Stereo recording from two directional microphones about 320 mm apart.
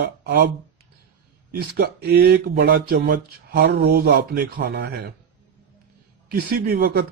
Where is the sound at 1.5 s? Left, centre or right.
Right.